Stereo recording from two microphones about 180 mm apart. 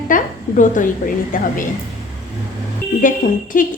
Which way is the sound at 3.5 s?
50° left (ahead or behind).